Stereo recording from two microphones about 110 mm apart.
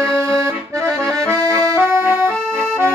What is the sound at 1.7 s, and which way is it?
Accordion, 20° right (ahead or behind).